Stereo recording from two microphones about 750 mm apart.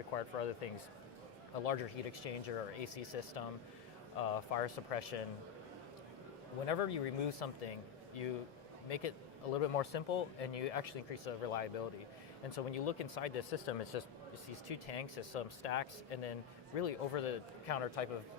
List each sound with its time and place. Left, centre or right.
0.2 s speech: left
6.7 s speech: left